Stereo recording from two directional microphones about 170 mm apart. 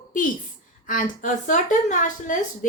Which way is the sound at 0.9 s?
50° left (ahead or behind).